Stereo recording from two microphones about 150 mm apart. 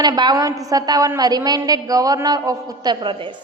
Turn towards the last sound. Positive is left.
turn(degrees=-35)  # may be behind; listen again after turning